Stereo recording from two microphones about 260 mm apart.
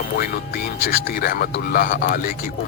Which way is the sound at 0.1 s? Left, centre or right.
Left.